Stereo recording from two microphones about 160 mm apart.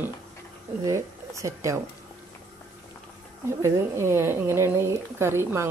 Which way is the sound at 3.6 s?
15° right (ahead or behind).